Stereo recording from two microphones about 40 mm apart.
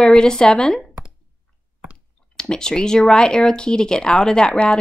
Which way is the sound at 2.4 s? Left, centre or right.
Centre.